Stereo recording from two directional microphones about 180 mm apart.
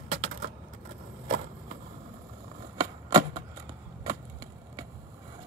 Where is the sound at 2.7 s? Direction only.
20° right (ahead or behind).